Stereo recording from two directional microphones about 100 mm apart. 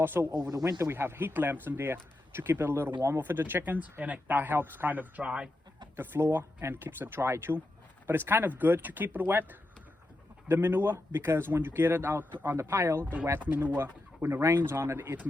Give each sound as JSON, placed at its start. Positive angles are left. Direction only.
{"t": 0.0, "sound": "speech", "side_deg": -20}
{"t": 0.3, "sound": "speech", "side_deg": -40}
{"t": 6.0, "sound": "speech", "side_deg": -20}